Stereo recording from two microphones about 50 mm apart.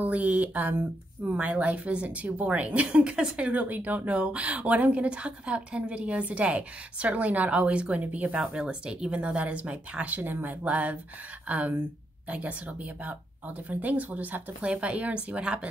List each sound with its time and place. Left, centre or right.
0.0 s a woman's voice: right
8.5 s a woman's voice: centre; by 14.4 s right
14.6 s a woman's voice: right